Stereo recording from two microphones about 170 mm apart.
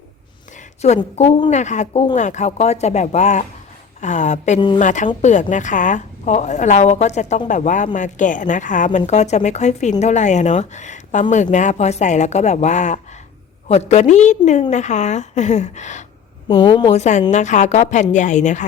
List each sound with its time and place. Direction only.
0.5 s a sound: 40° left (ahead or behind)
1.5 s a woman's voice: 45° left (ahead or behind)
16.5 s a woman's voice: 25° left (ahead or behind)
16.9 s a woman's voice: 45° left (ahead or behind)